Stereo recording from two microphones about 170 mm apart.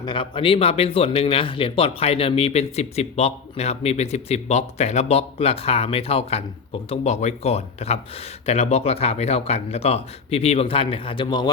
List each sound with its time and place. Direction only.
0.0 s speech: 30° left (ahead or behind)